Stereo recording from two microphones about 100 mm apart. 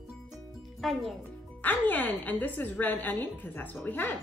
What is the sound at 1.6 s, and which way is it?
A woman's voice, 20° left (ahead or behind).